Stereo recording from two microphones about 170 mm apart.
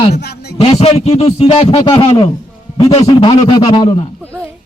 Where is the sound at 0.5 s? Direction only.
40° left (ahead or behind).